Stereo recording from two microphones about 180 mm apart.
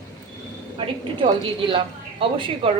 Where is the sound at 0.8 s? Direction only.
30° right (ahead or behind).